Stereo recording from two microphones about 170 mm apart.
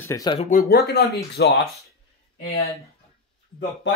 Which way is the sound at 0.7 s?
80° left.